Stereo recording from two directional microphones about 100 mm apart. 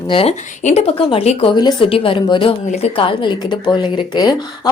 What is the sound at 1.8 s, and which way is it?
Speech, 65° left (ahead or behind).